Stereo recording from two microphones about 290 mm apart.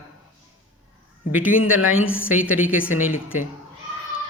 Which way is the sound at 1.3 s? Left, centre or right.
Centre.